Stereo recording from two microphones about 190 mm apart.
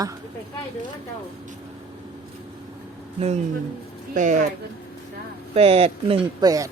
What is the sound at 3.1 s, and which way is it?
Speech, 35° right (ahead or behind).